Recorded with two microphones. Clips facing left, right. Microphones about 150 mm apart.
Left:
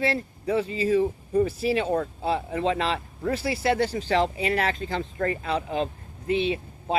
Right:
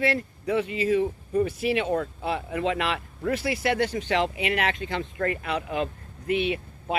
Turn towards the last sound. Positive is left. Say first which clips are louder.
# left 2 dB
turn(degrees=30)  # may be behind; listen again after turning